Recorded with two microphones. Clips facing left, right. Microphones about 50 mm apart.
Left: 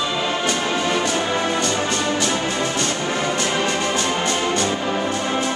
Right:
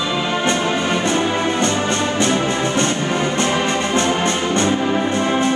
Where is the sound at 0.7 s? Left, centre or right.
Right.